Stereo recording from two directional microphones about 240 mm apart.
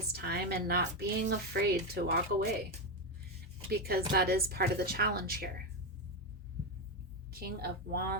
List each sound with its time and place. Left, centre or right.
0.1 s speech: right
3.7 s speech: right
7.3 s speech: right